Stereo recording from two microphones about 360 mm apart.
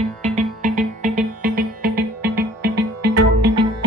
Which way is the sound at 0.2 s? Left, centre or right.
Centre.